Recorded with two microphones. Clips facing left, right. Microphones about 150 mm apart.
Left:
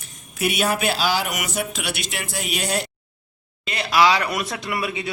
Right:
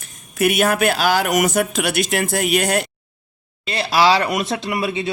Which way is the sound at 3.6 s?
30° right (ahead or behind).